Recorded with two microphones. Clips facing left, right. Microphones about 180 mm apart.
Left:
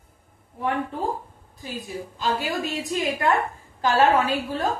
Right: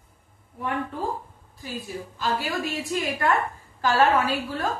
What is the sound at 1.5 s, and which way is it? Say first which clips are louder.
A woman's voice: left 1 dB; 20° left (ahead or behind).